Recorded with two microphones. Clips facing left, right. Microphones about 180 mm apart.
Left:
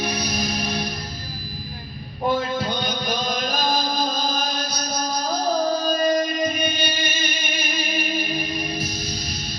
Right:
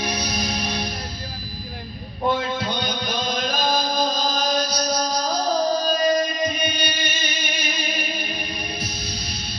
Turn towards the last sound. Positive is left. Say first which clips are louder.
# left 1 dB
turn(degrees=50)  # may be behind; listen again after turning